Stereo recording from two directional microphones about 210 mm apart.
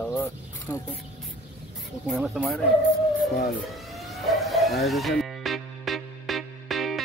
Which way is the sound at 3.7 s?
Centre (ahead or behind).